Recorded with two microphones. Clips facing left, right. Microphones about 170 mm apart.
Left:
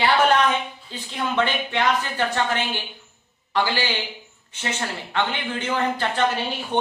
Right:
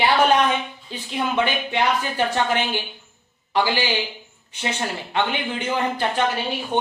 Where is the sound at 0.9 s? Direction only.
10° right (ahead or behind).